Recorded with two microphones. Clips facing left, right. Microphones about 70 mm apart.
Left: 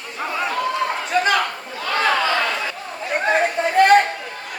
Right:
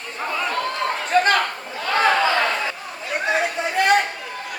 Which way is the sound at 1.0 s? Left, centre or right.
Right.